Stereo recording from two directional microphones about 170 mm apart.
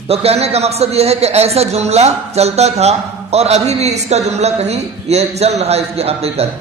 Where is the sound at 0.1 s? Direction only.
35° right (ahead or behind).